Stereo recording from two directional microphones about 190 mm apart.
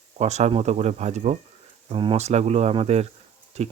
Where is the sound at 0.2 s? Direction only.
35° right (ahead or behind).